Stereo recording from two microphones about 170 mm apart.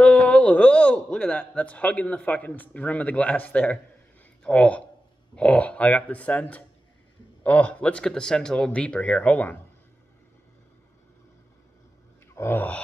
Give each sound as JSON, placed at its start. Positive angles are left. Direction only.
{"t": 0.0, "sound": "a man's voice", "side_deg": 5}
{"t": 12.4, "sound": "a man's voice", "side_deg": 10}